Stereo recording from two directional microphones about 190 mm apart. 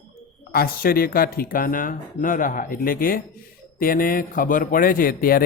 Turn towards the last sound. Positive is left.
turn(degrees=50)  # may be behind; listen again after turning